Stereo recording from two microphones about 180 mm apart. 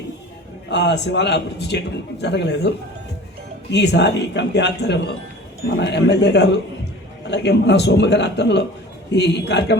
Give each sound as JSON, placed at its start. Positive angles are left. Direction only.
{"t": 0.7, "sound": "a man's voice", "side_deg": 70}